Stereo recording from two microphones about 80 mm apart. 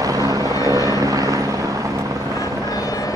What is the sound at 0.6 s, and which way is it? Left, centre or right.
Vehicle, right.